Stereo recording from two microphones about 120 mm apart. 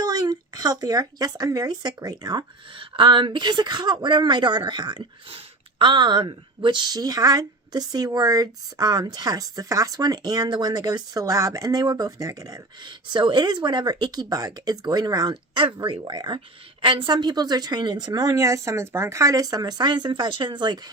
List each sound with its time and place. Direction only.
0.0 s a woman's voice: 35° right (ahead or behind)